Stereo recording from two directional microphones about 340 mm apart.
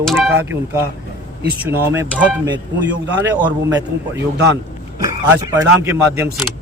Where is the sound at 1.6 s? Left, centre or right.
Centre.